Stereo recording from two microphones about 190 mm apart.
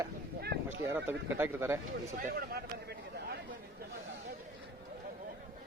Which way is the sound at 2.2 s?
50° right (ahead or behind).